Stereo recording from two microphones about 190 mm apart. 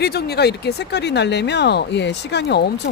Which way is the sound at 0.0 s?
55° left (ahead or behind).